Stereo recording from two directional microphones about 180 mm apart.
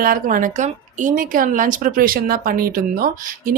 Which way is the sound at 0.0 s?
50° right (ahead or behind).